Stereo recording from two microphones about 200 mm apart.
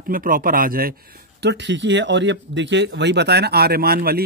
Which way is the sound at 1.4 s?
60° right (ahead or behind).